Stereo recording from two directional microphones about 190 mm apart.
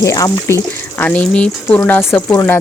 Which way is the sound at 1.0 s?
5° left (ahead or behind).